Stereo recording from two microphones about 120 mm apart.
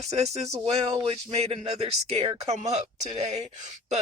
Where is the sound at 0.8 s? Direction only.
45° right (ahead or behind); by 3.4 s 70° right (ahead or behind).